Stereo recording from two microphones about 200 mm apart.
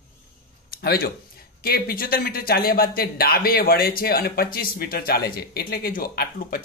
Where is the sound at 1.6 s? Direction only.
50° left (ahead or behind).